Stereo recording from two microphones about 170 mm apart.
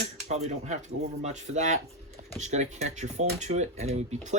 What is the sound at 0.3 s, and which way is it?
Speech, 40° right (ahead or behind).